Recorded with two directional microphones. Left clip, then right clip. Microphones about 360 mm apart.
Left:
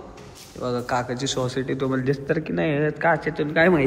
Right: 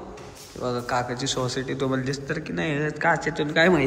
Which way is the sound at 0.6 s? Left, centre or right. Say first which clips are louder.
Left 1 dB; centre.